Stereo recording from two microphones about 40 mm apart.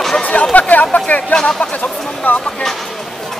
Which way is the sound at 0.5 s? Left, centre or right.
Left.